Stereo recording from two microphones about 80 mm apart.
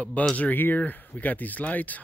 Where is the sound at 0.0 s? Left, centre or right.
Centre.